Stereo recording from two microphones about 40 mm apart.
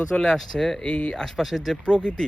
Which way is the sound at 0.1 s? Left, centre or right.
Centre.